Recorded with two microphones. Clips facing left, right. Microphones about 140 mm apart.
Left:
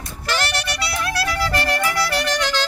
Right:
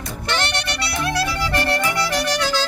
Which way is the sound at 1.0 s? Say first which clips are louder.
Right 1 dB; 15° right (ahead or behind).